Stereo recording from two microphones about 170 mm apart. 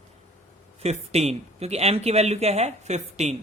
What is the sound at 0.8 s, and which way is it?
Speech, 40° right (ahead or behind).